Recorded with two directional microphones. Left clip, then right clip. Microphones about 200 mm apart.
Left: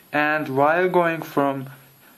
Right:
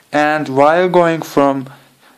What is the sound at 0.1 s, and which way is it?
Speech, 35° right (ahead or behind).